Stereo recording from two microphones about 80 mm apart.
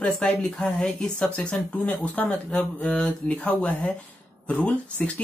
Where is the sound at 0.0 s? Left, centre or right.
Centre.